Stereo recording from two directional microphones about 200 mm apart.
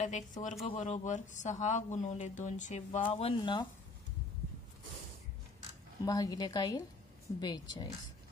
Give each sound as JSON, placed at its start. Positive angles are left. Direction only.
{"t": 0.0, "sound": "speech", "side_deg": 40}
{"t": 3.1, "sound": "a woman's voice", "side_deg": 25}
{"t": 6.0, "sound": "a woman's voice", "side_deg": 15}